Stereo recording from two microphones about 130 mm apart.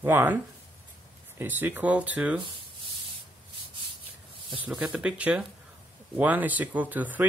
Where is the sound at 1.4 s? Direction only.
15° right (ahead or behind).